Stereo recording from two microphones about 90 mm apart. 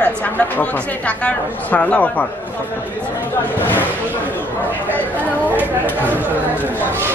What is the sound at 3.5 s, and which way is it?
Speech, 20° left (ahead or behind).